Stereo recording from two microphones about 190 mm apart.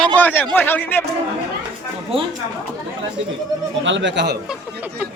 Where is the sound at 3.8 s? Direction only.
70° right (ahead or behind).